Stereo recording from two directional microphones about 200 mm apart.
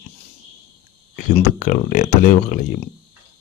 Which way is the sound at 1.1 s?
40° left (ahead or behind).